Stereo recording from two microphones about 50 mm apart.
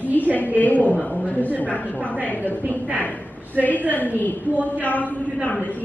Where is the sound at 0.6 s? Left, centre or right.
Left.